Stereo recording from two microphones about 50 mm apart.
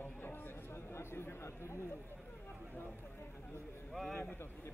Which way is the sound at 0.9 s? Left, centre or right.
Left.